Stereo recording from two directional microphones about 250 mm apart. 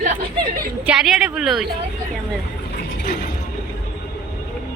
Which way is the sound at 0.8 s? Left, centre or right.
Centre.